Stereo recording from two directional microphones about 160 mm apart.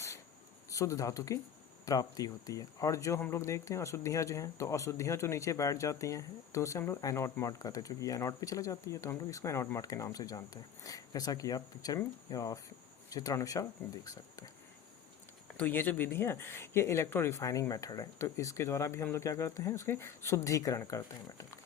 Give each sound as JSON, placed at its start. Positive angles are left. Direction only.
{"t": 0.7, "sound": "speech", "side_deg": 20}
{"t": 15.5, "sound": "speech", "side_deg": 10}